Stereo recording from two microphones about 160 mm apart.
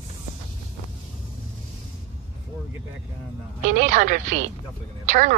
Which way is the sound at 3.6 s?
50° right (ahead or behind).